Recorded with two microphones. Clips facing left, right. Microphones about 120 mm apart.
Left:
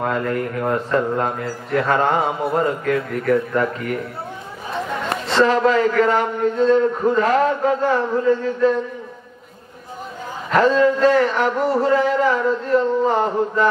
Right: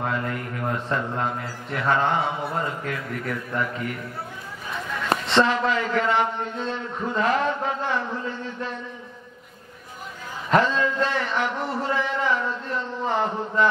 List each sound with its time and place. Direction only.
0.0 s a man's voice: 45° left (ahead or behind)
5.3 s a man's voice: 40° left (ahead or behind)
10.5 s a man's voice: 40° left (ahead or behind)